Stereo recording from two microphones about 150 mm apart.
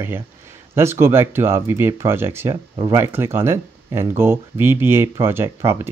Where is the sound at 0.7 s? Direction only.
15° right (ahead or behind).